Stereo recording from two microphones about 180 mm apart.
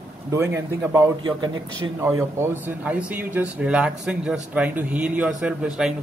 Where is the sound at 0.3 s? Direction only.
15° right (ahead or behind).